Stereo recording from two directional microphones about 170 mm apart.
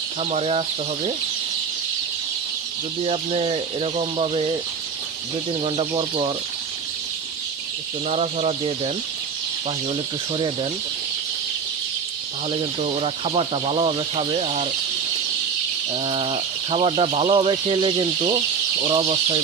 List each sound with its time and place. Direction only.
0.2 s speech: 40° right (ahead or behind)
3.0 s speech: 35° right (ahead or behind)
5.6 s speech: 30° right (ahead or behind)
8.1 s speech: 40° right (ahead or behind)
10.3 s speech: 30° right (ahead or behind)
12.5 s speech: 35° right (ahead or behind)
15.9 s speech: 30° right (ahead or behind)